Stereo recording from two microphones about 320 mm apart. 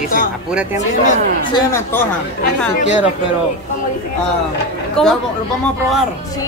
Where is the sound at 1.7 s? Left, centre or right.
Centre.